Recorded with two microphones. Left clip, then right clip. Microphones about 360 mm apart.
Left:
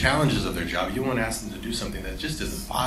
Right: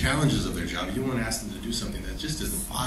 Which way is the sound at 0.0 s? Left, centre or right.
Centre.